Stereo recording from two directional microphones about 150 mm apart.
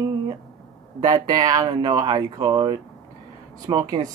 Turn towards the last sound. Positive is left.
turn(degrees=-25)  # may be behind; listen again after turning